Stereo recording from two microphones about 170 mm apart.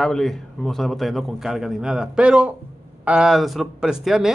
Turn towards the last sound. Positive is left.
turn(degrees=0)  # may be behind; listen again after turning